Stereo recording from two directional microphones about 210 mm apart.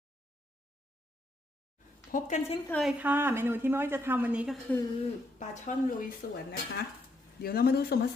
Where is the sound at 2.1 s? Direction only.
35° left (ahead or behind).